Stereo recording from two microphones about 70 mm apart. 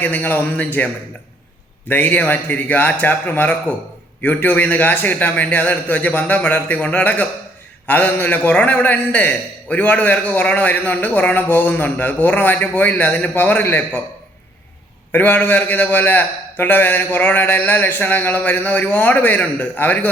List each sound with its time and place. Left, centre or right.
0.0 s a man's voice: left
1.9 s a man's voice: left
15.1 s a man's voice: left